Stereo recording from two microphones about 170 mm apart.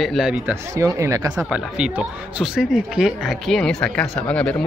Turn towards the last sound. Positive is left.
turn(degrees=5)  # may be behind; listen again after turning